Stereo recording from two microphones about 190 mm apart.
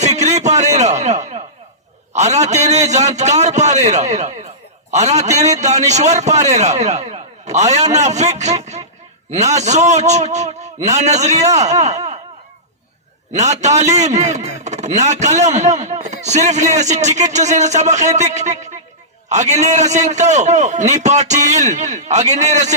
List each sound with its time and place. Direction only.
0.2 s a sound: 35° right (ahead or behind)
2.1 s a man's voice: 35° right (ahead or behind)
13.3 s a man's voice: 35° right (ahead or behind)